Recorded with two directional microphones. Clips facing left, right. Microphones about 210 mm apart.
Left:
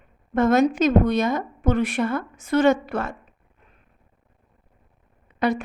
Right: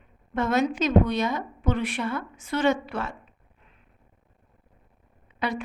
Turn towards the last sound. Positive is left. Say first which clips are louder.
# left 7 dB
turn(degrees=45)  # may be behind; listen again after turning